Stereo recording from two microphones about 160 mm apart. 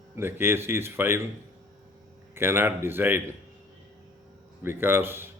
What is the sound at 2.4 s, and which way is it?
Speech, 15° right (ahead or behind).